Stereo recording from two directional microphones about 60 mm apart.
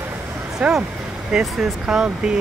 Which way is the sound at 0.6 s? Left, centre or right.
Centre.